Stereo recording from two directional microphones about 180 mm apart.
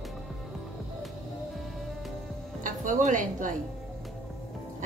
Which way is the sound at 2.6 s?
45° right (ahead or behind).